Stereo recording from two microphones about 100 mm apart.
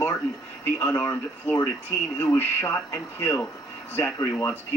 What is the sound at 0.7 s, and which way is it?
A man's voice, 25° left (ahead or behind).